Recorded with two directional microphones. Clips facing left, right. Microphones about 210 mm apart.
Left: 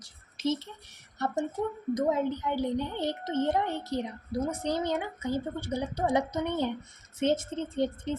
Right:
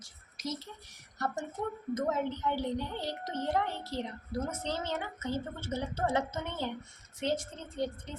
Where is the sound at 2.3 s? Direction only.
15° left (ahead or behind).